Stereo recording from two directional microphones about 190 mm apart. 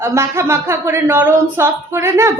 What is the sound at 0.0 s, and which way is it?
Speech, 15° right (ahead or behind).